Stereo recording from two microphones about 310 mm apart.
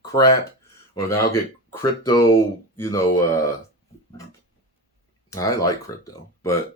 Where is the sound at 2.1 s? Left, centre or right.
Centre.